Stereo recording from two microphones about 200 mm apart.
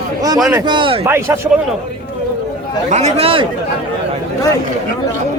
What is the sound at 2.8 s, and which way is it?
Speech, 35° right (ahead or behind).